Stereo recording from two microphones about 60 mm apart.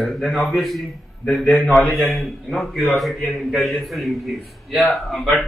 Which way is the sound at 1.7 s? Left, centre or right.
Centre.